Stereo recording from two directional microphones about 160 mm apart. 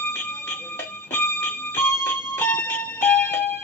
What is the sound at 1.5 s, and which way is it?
Music, 15° left (ahead or behind).